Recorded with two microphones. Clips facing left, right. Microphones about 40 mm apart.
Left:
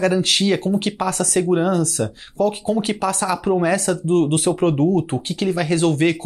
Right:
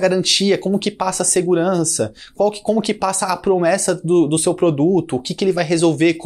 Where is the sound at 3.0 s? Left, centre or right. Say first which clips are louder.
Right 2 dB; left.